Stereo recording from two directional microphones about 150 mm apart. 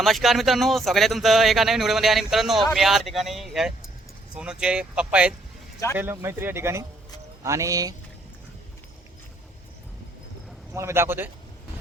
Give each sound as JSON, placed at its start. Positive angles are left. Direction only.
{"t": 0.0, "sound": "speech", "side_deg": 0}
{"t": 10.8, "sound": "speech", "side_deg": -20}